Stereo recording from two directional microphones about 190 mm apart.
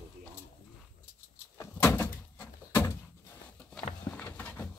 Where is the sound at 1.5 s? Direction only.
15° left (ahead or behind).